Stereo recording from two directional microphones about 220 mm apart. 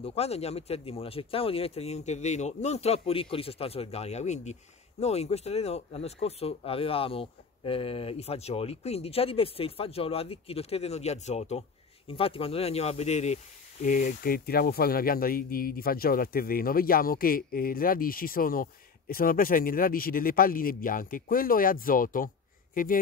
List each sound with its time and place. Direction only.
0.0 s speech: 30° left (ahead or behind)